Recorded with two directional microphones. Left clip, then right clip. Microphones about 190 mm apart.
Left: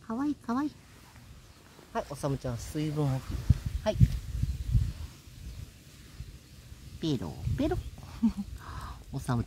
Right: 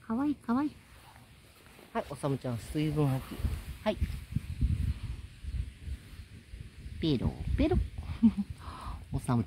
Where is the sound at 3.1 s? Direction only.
35° right (ahead or behind).